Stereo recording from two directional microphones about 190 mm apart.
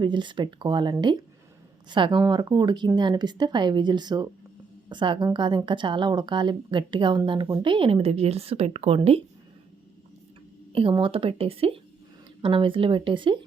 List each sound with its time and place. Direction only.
0.0 s a woman's voice: 25° right (ahead or behind)
10.7 s a woman's voice: 30° right (ahead or behind)